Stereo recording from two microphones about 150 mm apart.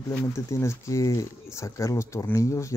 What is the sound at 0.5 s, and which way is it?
Speech, 20° left (ahead or behind).